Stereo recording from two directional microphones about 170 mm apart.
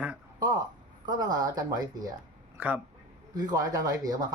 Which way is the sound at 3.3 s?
20° right (ahead or behind).